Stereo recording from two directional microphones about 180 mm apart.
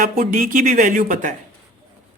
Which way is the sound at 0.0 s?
50° right (ahead or behind).